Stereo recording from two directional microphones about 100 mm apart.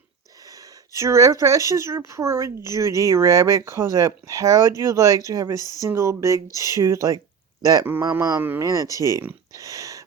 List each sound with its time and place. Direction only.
0.9 s speech: 30° right (ahead or behind)
5.5 s speech: 40° left (ahead or behind)
5.8 s speech: 30° right (ahead or behind)
8.4 s speech: 20° right (ahead or behind)
8.6 s speech: 35° right (ahead or behind)
9.5 s a sound: 35° right (ahead or behind)